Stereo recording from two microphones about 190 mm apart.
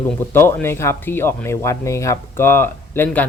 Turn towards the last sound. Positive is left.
turn(degrees=10)  # may be behind; listen again after turning